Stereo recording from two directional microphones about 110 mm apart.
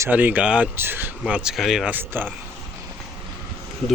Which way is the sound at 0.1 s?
15° right (ahead or behind).